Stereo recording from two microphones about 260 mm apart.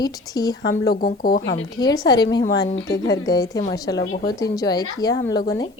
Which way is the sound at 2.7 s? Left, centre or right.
Left.